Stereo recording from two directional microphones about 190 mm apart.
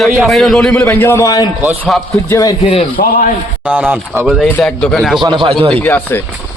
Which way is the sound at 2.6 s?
30° left (ahead or behind).